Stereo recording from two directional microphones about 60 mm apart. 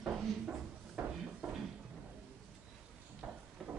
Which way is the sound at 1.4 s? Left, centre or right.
Centre.